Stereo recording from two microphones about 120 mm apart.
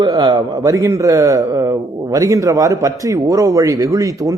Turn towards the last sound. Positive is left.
turn(degrees=-30)  # may be behind; listen again after turning